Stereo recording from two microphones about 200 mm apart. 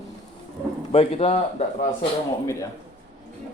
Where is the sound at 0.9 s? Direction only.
30° left (ahead or behind).